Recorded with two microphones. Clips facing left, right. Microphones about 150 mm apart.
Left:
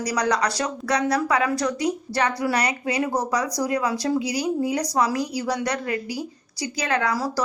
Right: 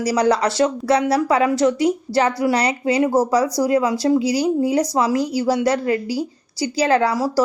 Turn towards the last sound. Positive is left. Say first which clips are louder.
# right 7 dB
turn(degrees=-30)  # may be behind; listen again after turning